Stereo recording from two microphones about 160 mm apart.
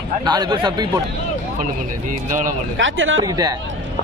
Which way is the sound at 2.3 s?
55° right (ahead or behind).